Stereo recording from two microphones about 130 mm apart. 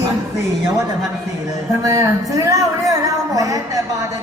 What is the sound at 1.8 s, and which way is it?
Speech, 25° right (ahead or behind).